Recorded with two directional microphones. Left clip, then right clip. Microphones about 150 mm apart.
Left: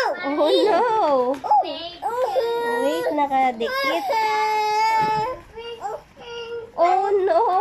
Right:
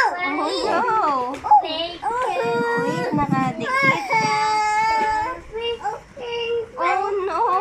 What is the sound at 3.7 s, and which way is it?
Baby cry, 25° left (ahead or behind).